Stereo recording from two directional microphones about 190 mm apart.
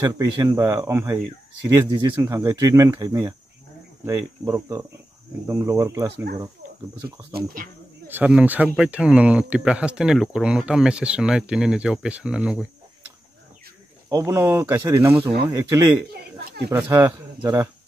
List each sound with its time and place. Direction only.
0.0 s speech: 20° right (ahead or behind)
7.3 s speech: 45° right (ahead or behind)
8.1 s speech: 10° right (ahead or behind)
14.0 s speech: 15° right (ahead or behind)